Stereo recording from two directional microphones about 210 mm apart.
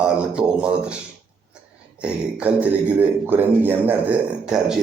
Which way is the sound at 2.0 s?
5° right (ahead or behind).